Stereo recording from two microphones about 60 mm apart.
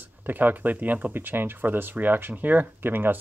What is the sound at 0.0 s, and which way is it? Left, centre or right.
Speech, right.